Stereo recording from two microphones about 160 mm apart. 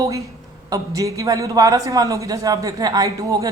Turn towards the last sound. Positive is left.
turn(degrees=-25)  # may be behind; listen again after turning